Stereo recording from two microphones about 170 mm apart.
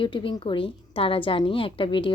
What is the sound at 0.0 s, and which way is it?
Speech, 30° left (ahead or behind).